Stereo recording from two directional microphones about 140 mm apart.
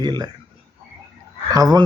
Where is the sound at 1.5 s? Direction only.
25° right (ahead or behind).